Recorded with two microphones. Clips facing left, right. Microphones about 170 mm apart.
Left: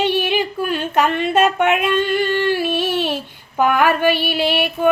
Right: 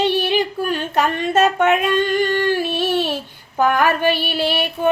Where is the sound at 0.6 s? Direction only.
40° right (ahead or behind).